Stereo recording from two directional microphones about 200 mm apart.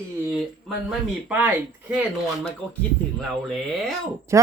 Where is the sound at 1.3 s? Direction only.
5° right (ahead or behind).